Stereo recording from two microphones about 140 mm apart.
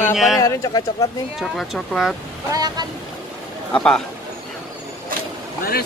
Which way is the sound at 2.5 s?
30° right (ahead or behind).